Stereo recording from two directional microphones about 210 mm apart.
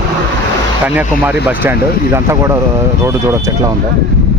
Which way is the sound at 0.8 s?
5° right (ahead or behind).